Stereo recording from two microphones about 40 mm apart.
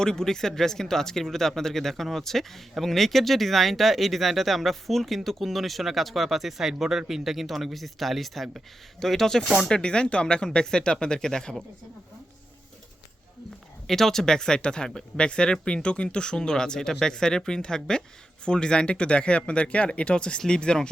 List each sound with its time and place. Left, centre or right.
0.0 s speech: centre
9.6 s speech: left
13.8 s speech: centre